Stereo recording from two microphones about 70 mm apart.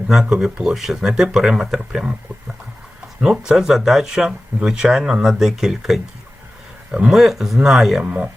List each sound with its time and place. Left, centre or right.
0.1 s speech: centre
3.2 s speech: centre
8.0 s speech: right